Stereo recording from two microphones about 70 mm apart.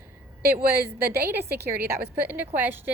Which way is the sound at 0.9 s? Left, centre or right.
Right.